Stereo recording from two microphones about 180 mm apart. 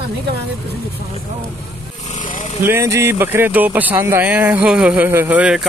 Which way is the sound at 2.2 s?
45° left (ahead or behind).